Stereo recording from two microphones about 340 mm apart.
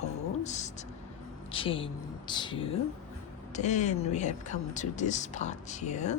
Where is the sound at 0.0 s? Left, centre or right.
Centre.